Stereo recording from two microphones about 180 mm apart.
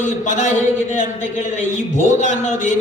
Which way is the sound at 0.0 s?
45° left (ahead or behind).